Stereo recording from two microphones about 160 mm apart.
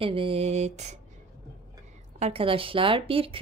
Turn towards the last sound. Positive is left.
turn(degrees=-35)  # may be behind; listen again after turning